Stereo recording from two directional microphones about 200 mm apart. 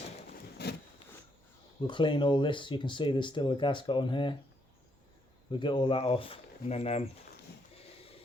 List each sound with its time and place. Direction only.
0.6 s a sound: 55° left (ahead or behind)
1.9 s speech: 25° left (ahead or behind)
5.5 s speech: 25° left (ahead or behind)